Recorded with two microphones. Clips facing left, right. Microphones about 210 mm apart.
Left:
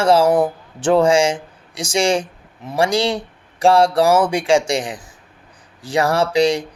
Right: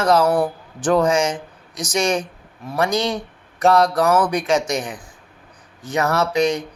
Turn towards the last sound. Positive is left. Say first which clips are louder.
# left 3 dB
turn(degrees=30)  # may be behind; listen again after turning